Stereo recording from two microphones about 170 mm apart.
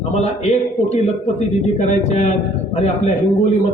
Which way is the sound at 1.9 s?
40° left (ahead or behind).